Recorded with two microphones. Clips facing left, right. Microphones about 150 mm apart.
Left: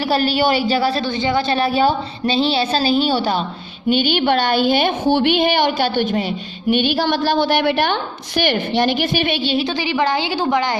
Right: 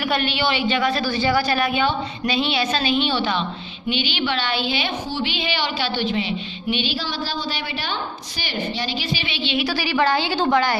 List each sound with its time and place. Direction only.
0.1 s a woman's voice: 40° left (ahead or behind)
9.6 s a woman's voice: 20° left (ahead or behind)